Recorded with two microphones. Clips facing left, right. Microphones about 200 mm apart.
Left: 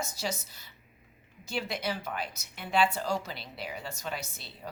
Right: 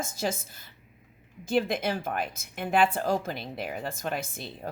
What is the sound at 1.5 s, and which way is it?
A woman's voice, 50° right (ahead or behind).